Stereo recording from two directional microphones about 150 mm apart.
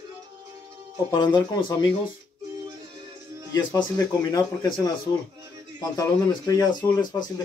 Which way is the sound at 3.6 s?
25° left (ahead or behind).